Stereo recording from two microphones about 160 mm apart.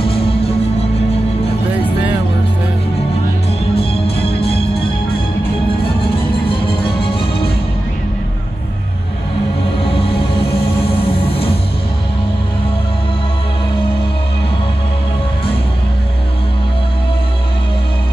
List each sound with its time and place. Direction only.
3.7 s music: 35° left (ahead or behind)